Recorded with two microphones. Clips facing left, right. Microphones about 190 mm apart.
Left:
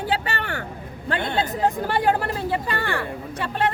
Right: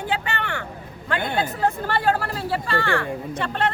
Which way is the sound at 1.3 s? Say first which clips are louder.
Left 1 dB; 20° left (ahead or behind).